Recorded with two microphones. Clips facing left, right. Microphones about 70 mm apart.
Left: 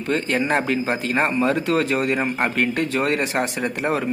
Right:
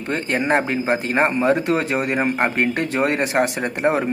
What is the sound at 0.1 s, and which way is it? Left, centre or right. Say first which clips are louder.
Speech: right 1 dB; right.